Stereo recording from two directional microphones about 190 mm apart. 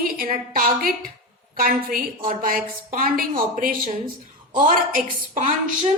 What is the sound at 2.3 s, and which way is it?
Speech, 45° right (ahead or behind).